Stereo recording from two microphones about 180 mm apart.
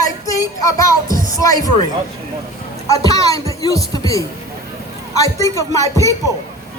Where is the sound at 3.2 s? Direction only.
20° left (ahead or behind).